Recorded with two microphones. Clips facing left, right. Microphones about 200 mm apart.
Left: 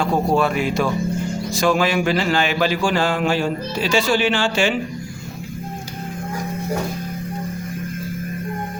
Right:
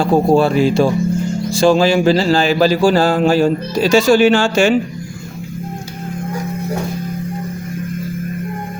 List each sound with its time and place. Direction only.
0.0 s speech: 30° right (ahead or behind)